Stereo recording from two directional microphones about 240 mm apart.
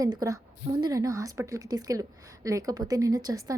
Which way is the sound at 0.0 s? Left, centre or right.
Centre.